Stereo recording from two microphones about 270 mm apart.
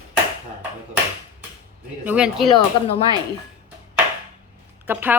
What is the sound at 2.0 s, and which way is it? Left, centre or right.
Speech, centre.